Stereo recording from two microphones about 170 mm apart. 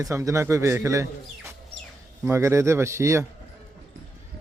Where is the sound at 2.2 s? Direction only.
15° right (ahead or behind).